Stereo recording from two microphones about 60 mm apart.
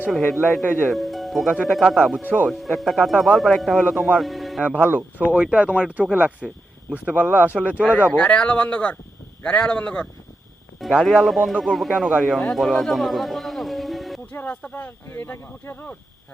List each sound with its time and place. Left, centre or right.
0.1 s speech: centre
4.9 s speech: right
5.3 s speech: centre
7.9 s speech: left
10.8 s speech: centre
12.7 s music: centre
14.4 s speech: left